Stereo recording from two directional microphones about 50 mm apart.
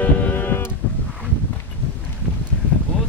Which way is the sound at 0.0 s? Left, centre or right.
Left.